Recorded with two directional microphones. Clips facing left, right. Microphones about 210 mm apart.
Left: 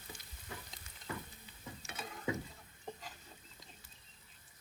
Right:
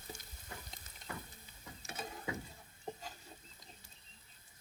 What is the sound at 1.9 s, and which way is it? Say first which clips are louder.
Mechanisms: right 3 dB; 30° right (ahead or behind).